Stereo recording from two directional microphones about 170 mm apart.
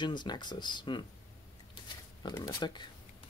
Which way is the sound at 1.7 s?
25° left (ahead or behind).